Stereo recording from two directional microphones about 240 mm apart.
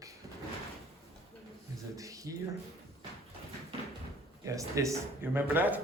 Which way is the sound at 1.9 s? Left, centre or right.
Centre.